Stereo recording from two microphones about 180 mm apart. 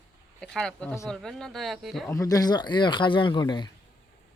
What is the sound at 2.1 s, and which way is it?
Speech, 20° left (ahead or behind).